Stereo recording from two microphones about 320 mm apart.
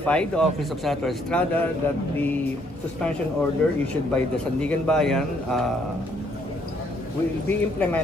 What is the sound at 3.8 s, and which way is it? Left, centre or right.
Speech, centre.